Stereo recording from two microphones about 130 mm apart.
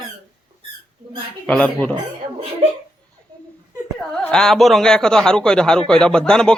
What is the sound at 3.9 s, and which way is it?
A man's voice, centre (ahead or behind).